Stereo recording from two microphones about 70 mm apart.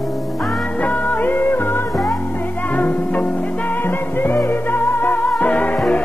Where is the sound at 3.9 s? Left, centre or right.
Left.